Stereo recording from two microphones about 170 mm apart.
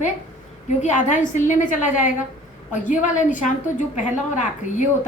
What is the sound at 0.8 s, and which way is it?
A woman's voice, 45° left (ahead or behind).